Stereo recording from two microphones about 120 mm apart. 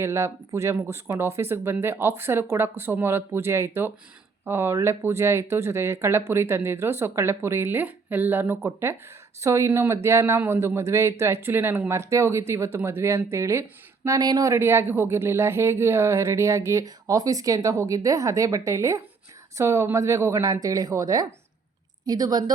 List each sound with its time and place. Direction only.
0.0 s a woman's voice: 20° right (ahead or behind)